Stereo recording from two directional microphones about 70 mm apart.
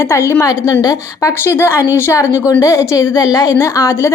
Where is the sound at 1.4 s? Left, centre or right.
Left.